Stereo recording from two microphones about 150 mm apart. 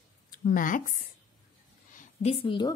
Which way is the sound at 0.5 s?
65° left (ahead or behind).